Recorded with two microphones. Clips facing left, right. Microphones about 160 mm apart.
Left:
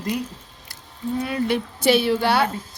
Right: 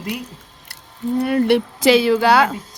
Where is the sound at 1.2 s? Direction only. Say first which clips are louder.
Right 8 dB; 60° right (ahead or behind); by 2.5 s 90° right.